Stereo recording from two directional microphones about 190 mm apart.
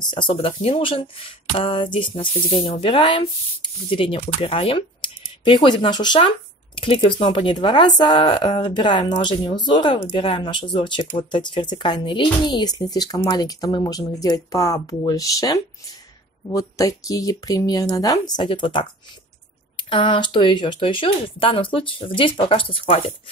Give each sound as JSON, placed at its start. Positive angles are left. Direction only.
{"t": 0.0, "sound": "speech", "side_deg": 25}